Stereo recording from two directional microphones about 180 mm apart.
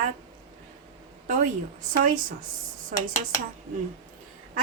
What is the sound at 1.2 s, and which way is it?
Speech, 45° right (ahead or behind).